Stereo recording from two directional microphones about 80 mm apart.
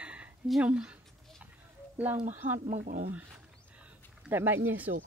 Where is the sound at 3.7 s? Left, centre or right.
Centre.